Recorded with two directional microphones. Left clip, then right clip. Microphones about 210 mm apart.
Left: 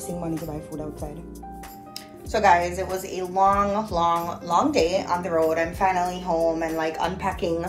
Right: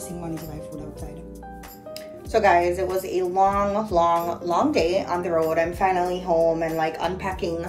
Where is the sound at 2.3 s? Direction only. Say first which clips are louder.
Right 1 dB; 10° right (ahead or behind).